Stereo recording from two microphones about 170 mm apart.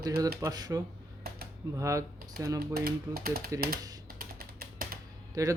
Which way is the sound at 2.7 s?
65° right (ahead or behind).